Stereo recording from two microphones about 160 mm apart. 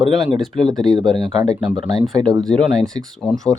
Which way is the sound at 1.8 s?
30° right (ahead or behind).